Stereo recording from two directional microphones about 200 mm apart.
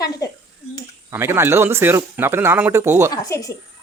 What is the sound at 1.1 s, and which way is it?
Speech, 10° right (ahead or behind).